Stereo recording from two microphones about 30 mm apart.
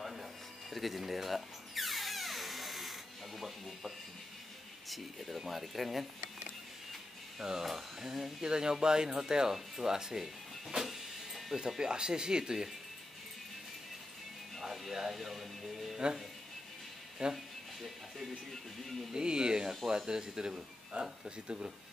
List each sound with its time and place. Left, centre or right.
0.1 s music: centre
4.8 s speech: centre
7.6 s speech: centre
8.5 s speech: right
10.8 s printer: centre
11.8 s speech: right
14.6 s speech: centre
17.2 s speech: right
19.1 s speech: right